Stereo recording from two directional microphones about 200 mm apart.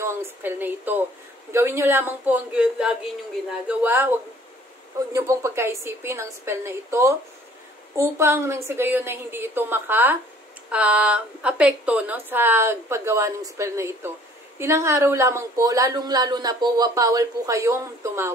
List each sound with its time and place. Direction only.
0.0 s a woman's voice: 10° right (ahead or behind)